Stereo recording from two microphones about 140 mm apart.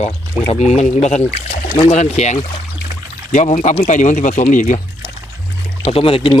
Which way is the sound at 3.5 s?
60° left (ahead or behind).